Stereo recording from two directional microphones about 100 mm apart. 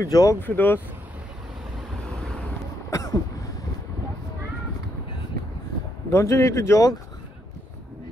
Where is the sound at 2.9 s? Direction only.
40° left (ahead or behind).